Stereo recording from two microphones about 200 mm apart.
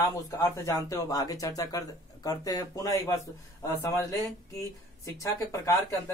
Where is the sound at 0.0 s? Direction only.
15° left (ahead or behind).